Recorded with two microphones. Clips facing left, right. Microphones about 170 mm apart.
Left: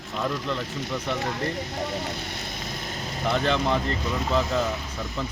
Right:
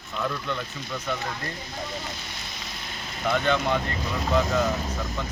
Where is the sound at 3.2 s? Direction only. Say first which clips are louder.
Even; 30° left (ahead or behind).